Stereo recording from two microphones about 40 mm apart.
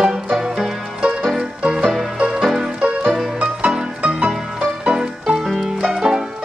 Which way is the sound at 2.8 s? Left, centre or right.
Right.